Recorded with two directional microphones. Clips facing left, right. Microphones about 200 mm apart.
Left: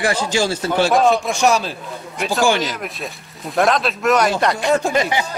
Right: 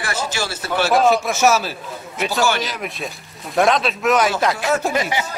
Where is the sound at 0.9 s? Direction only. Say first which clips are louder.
Right 2 dB; 5° right (ahead or behind).